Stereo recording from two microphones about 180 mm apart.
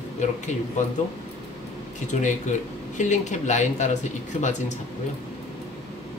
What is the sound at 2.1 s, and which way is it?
Speech, 40° left (ahead or behind).